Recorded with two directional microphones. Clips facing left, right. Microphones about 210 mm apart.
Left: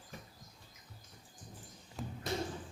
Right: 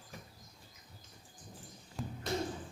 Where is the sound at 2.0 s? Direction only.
Centre (ahead or behind).